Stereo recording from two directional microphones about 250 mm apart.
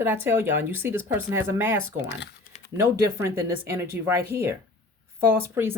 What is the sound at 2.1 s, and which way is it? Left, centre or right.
Typing, left.